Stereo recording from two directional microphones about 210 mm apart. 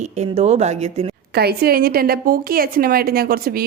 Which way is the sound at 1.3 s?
50° right (ahead or behind).